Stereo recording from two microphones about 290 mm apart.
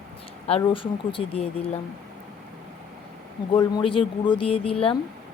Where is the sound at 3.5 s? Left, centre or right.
Centre.